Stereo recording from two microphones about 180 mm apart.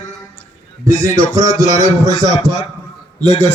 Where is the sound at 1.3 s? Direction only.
20° right (ahead or behind).